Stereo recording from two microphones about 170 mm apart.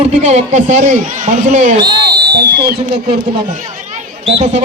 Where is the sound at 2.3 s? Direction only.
70° right (ahead or behind).